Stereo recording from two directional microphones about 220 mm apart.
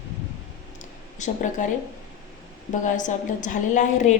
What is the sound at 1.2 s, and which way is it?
Speech, 35° left (ahead or behind).